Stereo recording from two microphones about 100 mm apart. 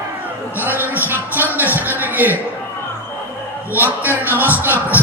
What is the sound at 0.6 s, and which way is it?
Music, 20° right (ahead or behind).